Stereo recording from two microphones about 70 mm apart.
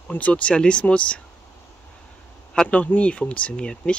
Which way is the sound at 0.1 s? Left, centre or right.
Centre.